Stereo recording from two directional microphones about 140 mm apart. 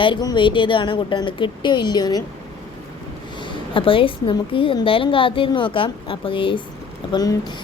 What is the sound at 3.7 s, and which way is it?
Speech, 40° left (ahead or behind).